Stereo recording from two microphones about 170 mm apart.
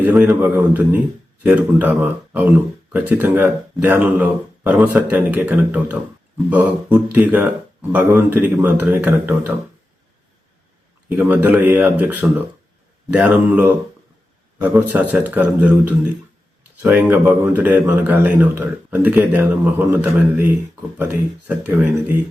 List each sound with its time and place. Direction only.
0.0 s a man's voice: 10° right (ahead or behind)
11.2 s a man's voice: 10° right (ahead or behind)